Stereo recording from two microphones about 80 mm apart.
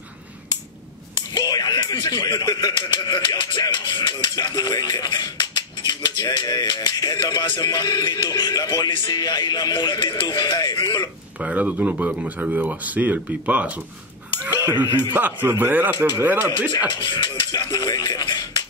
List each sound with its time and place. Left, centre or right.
1.1 s speech: left
11.3 s speech: centre
14.9 s speech: left
15.1 s speech: right
16.7 s speech: left